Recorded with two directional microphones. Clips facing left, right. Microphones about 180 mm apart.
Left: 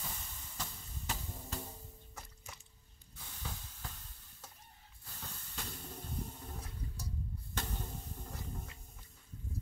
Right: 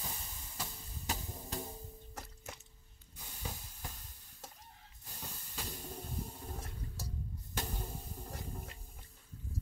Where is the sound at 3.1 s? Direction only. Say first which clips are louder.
Right 2 dB; 15° right (ahead or behind).